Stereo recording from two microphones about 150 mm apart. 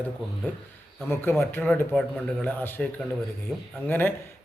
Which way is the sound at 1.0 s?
15° left (ahead or behind).